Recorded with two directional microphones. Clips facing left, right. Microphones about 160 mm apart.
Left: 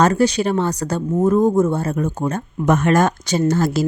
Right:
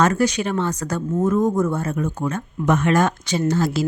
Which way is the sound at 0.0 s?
30° left (ahead or behind).